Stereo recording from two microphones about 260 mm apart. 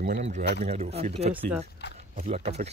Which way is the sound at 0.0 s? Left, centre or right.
Right.